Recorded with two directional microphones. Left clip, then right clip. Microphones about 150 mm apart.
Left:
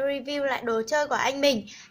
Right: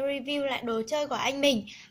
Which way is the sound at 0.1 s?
40° left (ahead or behind).